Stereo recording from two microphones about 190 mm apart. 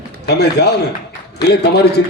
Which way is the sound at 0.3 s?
60° left (ahead or behind).